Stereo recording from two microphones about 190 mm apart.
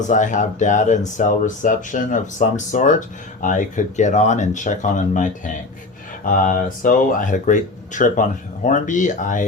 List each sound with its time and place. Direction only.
0.1 s speech: 40° left (ahead or behind)